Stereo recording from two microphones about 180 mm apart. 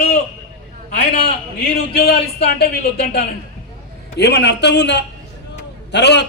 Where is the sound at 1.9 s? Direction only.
60° left (ahead or behind).